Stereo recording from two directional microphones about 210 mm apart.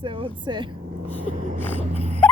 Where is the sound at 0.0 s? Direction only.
25° right (ahead or behind).